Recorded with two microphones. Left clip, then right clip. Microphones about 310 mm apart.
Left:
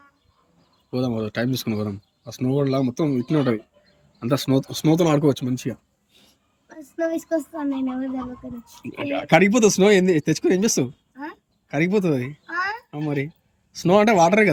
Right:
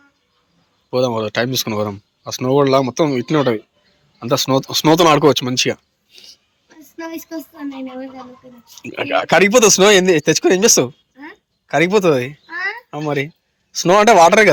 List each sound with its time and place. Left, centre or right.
0.9 s speech: centre
5.5 s speech: right
6.1 s a sound: centre
6.9 s speech: centre
9.0 s speech: centre